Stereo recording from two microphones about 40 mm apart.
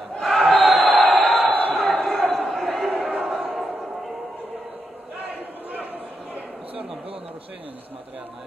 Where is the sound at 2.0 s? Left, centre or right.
Centre.